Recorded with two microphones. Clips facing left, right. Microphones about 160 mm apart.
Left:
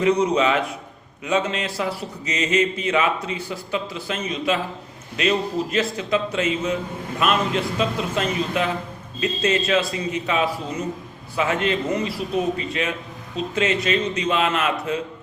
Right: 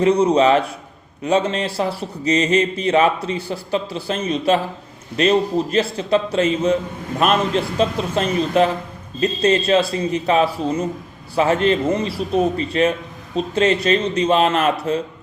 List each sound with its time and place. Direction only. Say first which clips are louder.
0.0 s a man's voice: right 4 dB; 30° right (ahead or behind)